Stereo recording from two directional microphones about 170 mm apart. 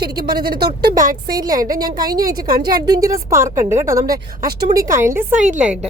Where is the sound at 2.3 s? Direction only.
60° right (ahead or behind).